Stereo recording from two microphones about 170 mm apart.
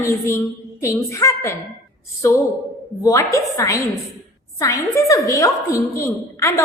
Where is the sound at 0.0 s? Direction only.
15° left (ahead or behind).